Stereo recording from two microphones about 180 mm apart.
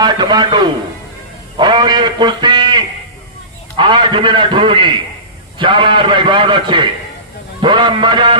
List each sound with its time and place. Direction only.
0.0 s a man's voice: 25° right (ahead or behind)